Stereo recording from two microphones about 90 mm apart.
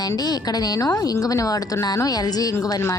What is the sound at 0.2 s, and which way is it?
A woman's voice, 50° left (ahead or behind).